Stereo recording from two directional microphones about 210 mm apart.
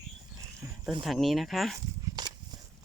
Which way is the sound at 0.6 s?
15° right (ahead or behind).